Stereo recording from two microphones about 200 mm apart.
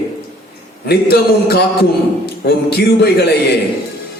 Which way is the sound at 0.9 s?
55° left (ahead or behind).